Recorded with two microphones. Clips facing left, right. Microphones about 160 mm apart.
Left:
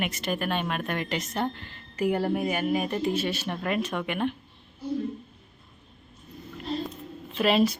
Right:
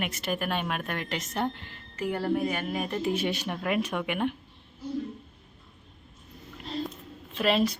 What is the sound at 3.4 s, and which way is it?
Speech, 5° right (ahead or behind).